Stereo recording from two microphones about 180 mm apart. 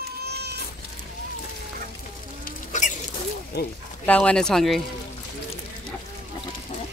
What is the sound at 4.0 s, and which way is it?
Speech, 5° left (ahead or behind).